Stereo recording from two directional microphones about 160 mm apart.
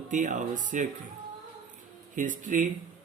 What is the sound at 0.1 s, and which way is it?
Speech, 50° right (ahead or behind).